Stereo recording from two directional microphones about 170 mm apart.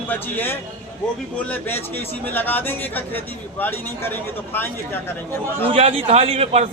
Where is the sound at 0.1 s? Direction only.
10° left (ahead or behind).